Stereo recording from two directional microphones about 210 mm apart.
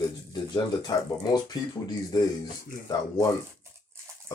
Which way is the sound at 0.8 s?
20° left (ahead or behind).